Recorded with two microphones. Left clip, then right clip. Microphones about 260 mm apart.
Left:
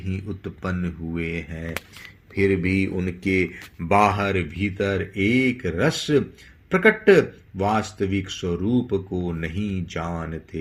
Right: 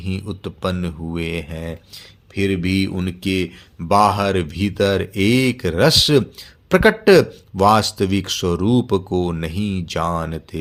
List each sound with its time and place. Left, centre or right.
0.0 s speech: right